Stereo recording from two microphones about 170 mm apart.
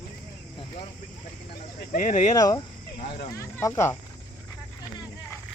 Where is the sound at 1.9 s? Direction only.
50° left (ahead or behind).